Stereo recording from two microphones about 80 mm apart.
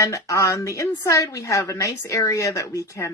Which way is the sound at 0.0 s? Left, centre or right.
Left.